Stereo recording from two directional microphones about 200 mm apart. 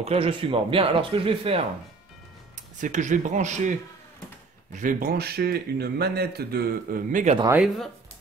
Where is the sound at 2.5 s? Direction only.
40° right (ahead or behind).